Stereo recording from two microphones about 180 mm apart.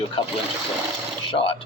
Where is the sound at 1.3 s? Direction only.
30° left (ahead or behind).